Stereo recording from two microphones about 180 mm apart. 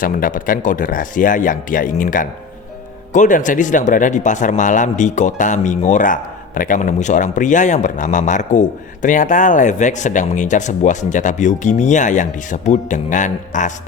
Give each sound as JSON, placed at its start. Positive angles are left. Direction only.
{"t": 0.0, "sound": "speech", "side_deg": 50}